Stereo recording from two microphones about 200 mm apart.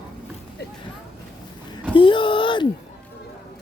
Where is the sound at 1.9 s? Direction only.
25° left (ahead or behind).